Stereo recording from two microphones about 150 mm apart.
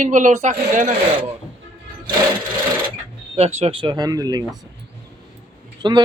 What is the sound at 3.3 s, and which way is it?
Speech, 45° right (ahead or behind).